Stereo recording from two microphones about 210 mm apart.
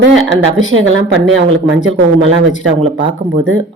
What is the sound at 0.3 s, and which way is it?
Speech, 65° right (ahead or behind).